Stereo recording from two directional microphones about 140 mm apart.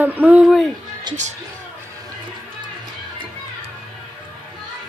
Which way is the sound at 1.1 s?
35° right (ahead or behind).